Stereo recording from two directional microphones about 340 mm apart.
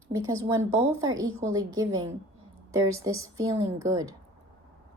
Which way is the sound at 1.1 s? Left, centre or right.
Right.